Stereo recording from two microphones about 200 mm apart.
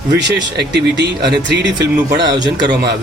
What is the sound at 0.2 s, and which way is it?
Speech, 55° right (ahead or behind).